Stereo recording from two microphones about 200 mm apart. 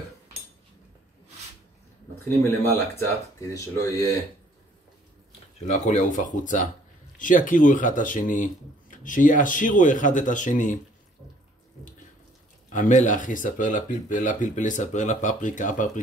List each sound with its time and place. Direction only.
2.2 s speech: 10° left (ahead or behind)
5.7 s speech: 35° left (ahead or behind)
12.6 s speech: 40° left (ahead or behind)